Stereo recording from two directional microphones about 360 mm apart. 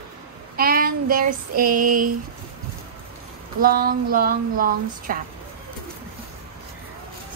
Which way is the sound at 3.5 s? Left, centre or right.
Right.